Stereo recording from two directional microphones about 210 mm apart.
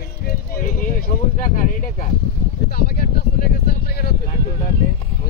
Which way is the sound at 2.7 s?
50° left (ahead or behind).